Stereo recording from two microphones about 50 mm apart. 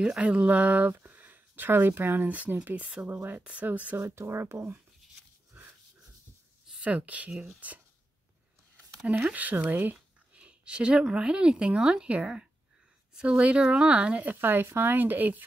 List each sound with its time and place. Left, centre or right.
0.0 s speech: right
0.9 s a sound: right
2.2 s speech: right
2.7 s speech: centre
3.1 s speech: right
3.6 s speech: right
3.9 s speech: right
7.0 s speech: right
9.3 s speech: right
10.3 s speech: right